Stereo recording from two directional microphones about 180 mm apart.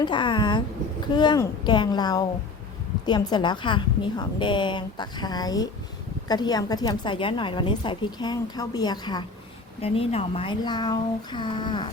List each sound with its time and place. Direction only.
0.0 s a woman's voice: 25° left (ahead or behind)